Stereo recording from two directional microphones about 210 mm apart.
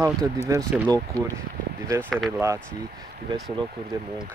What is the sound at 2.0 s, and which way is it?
Speech, 5° left (ahead or behind).